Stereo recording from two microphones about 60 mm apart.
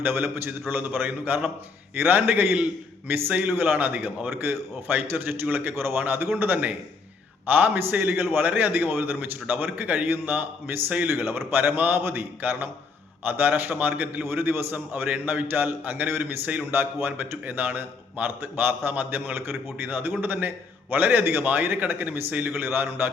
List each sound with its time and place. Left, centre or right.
0.0 s a man's voice: right
11.1 s a man's voice: right
14.3 s a man's voice: right
22.5 s a man's voice: right